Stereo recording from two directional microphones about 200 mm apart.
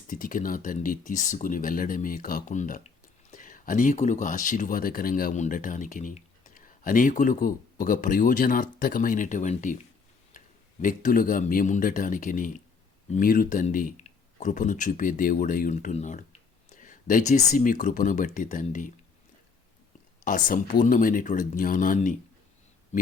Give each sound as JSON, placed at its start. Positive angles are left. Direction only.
{"t": 0.1, "sound": "speech", "side_deg": 45}
{"t": 20.2, "sound": "speech", "side_deg": 40}